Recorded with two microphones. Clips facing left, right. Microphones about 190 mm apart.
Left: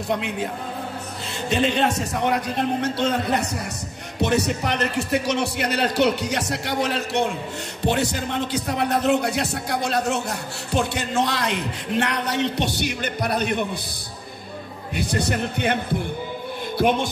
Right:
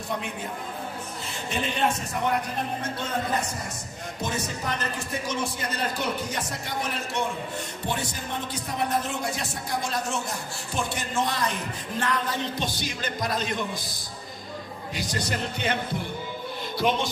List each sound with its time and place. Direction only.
1.6 s a man's voice: 90° left; by 13.7 s 65° left (ahead or behind)
15.0 s a man's voice: 60° left (ahead or behind)